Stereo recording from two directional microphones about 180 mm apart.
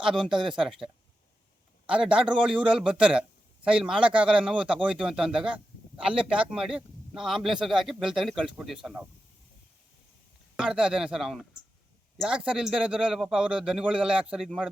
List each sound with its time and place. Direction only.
0.0 s a man's voice: 5° right (ahead or behind)
0.3 s speech: 25° right (ahead or behind)
0.5 s a man's voice: 5° right (ahead or behind)
1.9 s a man's voice: 5° right (ahead or behind)
10.6 s a man's voice: 5° right (ahead or behind)